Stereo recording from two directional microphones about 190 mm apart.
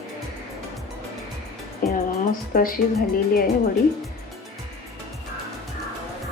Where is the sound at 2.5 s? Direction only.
50° left (ahead or behind).